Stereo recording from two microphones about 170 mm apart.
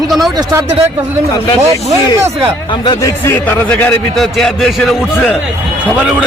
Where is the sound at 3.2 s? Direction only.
10° left (ahead or behind).